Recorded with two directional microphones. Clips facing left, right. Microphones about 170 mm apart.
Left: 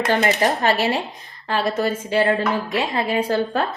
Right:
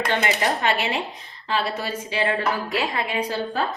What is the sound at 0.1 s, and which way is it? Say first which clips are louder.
A woman's voice: left 6 dB; 35° left (ahead or behind).